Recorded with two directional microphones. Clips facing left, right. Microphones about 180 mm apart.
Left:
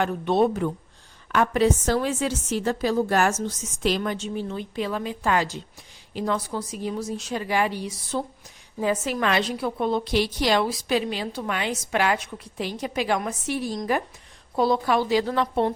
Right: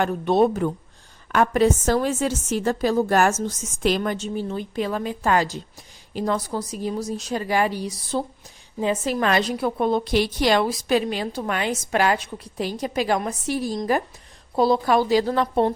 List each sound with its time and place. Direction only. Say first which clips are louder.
0.0 s a woman's voice: right 2 dB; 40° right (ahead or behind)